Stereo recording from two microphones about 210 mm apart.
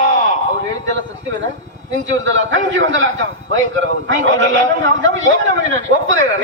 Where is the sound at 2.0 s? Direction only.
65° right (ahead or behind).